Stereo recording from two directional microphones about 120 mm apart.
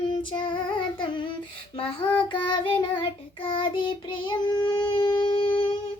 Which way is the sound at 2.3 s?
40° left (ahead or behind).